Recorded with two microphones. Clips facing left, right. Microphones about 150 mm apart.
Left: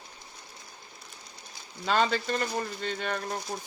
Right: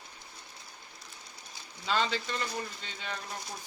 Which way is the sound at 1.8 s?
50° left (ahead or behind).